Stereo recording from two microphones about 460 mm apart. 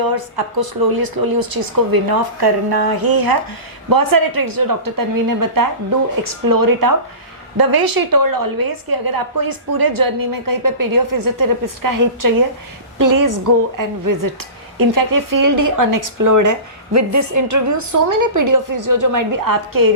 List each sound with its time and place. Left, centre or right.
0.0 s a woman's voice: right